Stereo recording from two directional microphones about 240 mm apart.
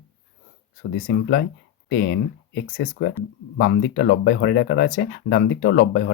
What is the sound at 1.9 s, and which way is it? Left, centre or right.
Speech, left.